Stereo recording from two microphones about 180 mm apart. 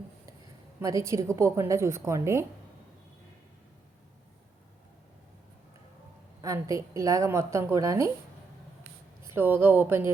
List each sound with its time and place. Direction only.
0.8 s a woman's voice: 15° right (ahead or behind)
6.4 s a woman's voice: 15° right (ahead or behind)
9.2 s a woman's voice: 15° right (ahead or behind)